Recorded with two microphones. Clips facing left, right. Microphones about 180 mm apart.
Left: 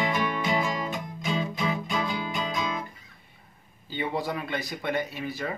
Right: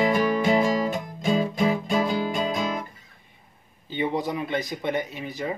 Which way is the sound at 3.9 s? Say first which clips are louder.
Right 4 dB; 20° right (ahead or behind).